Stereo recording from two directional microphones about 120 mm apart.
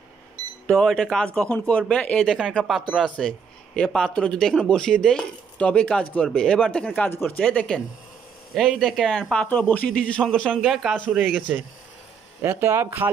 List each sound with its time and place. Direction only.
0.7 s speech: 5° left (ahead or behind)
8.5 s a man's voice: 5° right (ahead or behind); by 13.1 s 20° right (ahead or behind)